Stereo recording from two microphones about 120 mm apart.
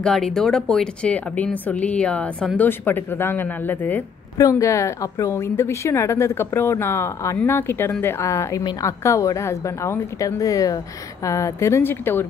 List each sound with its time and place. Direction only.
0.0 s speech: 5° left (ahead or behind)
4.4 s a woman's voice: 25° left (ahead or behind)